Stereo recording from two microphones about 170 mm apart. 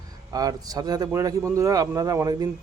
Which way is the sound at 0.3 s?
20° right (ahead or behind).